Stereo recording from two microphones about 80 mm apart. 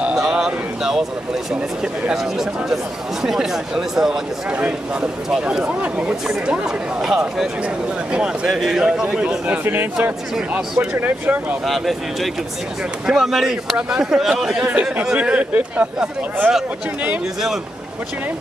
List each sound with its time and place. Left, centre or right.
0.0 s a sound: centre
2.0 s speech: centre
8.5 s speech: centre; by 11.5 s right
11.6 s speech: centre